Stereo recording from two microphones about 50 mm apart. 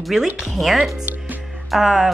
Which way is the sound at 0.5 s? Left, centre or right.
Centre.